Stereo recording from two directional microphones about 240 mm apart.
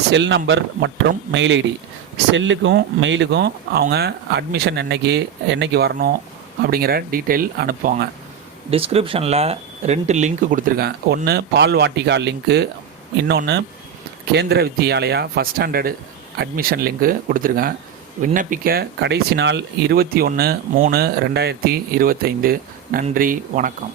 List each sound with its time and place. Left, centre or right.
0.1 s speech: right
8.7 s speech: right